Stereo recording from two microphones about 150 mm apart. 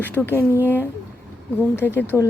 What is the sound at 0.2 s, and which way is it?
Speech, 5° left (ahead or behind).